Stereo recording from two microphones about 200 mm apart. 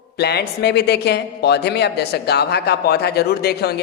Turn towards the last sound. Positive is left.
turn(degrees=55)  # may be behind; listen again after turning